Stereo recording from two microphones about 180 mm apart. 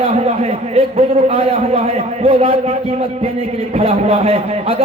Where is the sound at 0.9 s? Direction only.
35° right (ahead or behind).